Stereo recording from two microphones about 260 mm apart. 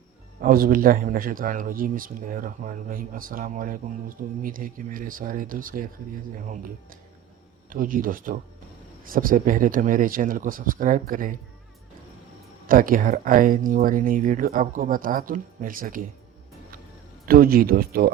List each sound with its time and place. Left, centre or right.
0.4 s speech: right
7.7 s speech: right
12.6 s speech: right
17.2 s speech: right